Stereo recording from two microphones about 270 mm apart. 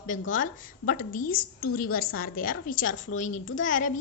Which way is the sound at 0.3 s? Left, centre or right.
Left.